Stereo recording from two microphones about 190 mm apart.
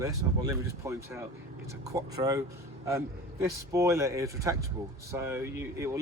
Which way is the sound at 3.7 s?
15° right (ahead or behind).